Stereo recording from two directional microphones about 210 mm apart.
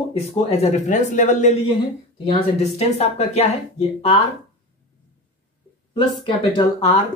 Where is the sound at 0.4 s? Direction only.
30° left (ahead or behind).